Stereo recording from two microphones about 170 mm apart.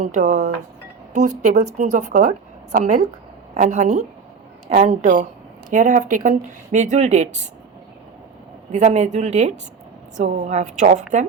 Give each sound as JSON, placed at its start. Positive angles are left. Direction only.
{"t": 0.0, "sound": "speech", "side_deg": -45}
{"t": 8.7, "sound": "a woman's voice", "side_deg": -45}